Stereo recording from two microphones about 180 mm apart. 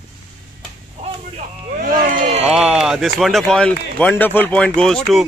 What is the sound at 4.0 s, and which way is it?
Speech, 10° left (ahead or behind).